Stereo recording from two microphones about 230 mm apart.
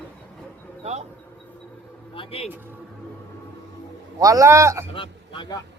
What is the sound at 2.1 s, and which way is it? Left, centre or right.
Music, left.